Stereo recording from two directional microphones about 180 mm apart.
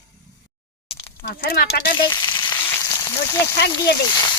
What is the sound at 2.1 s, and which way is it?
Frying, 25° left (ahead or behind).